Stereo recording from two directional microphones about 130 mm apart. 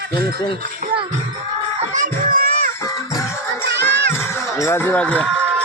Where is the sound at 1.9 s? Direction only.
80° right.